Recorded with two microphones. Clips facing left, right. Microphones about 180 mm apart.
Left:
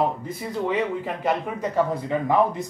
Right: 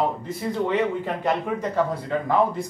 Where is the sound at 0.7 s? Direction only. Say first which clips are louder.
Even; 5° left (ahead or behind).